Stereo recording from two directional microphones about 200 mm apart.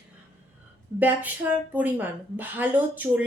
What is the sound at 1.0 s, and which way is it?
Speech, 10° right (ahead or behind).